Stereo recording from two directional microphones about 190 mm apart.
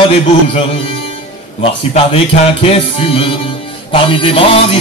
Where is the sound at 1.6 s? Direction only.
30° left (ahead or behind).